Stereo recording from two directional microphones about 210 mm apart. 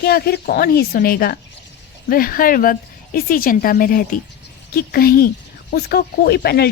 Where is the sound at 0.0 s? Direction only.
45° left (ahead or behind).